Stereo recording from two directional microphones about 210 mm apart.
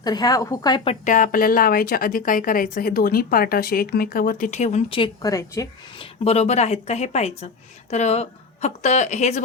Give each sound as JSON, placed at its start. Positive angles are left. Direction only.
{"t": 0.0, "sound": "a woman's voice", "side_deg": 20}
{"t": 1.0, "sound": "a woman's voice", "side_deg": 40}
{"t": 6.2, "sound": "a woman's voice", "side_deg": 30}